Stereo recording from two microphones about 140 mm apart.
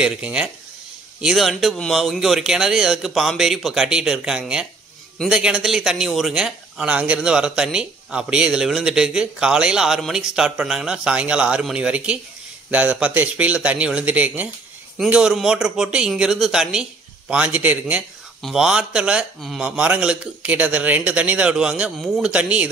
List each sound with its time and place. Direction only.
0.0 s a man's voice: 5° right (ahead or behind)